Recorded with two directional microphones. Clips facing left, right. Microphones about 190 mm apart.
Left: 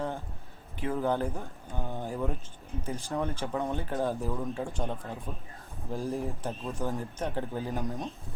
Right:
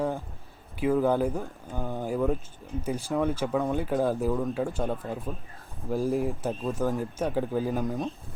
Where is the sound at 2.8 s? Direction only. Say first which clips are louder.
Right 5 dB; 10° right (ahead or behind).